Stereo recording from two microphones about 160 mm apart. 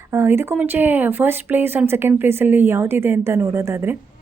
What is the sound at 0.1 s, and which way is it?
A woman's voice, 15° right (ahead or behind).